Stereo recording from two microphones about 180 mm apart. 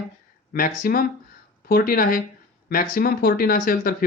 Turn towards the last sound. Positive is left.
turn(degrees=50)  # may be behind; listen again after turning